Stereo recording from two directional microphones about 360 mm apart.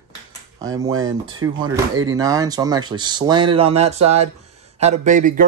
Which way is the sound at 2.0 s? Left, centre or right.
Centre.